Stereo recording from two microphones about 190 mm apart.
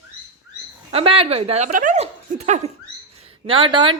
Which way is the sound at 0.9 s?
30° right (ahead or behind).